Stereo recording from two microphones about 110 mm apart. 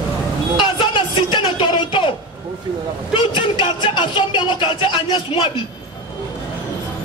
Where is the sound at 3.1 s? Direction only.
50° left (ahead or behind).